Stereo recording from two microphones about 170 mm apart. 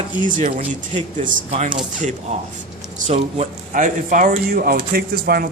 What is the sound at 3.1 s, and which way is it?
Speech, 40° right (ahead or behind).